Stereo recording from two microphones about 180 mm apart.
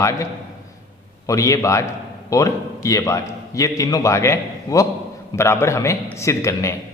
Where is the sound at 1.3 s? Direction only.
20° left (ahead or behind).